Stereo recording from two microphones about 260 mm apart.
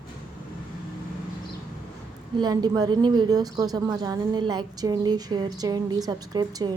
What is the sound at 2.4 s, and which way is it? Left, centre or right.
A woman's voice, centre.